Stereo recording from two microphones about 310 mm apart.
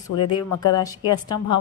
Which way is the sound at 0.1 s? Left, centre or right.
Left.